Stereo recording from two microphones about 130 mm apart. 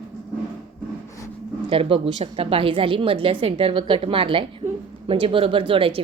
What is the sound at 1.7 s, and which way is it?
A woman's voice, 45° right (ahead or behind).